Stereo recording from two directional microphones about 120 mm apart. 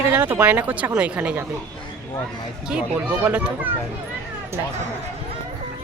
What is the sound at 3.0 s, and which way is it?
Speech, 10° right (ahead or behind).